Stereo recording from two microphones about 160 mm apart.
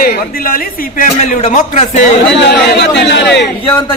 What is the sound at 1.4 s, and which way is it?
Speech, 45° left (ahead or behind).